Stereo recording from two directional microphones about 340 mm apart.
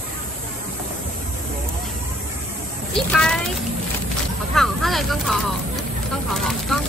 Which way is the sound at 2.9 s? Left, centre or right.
Centre.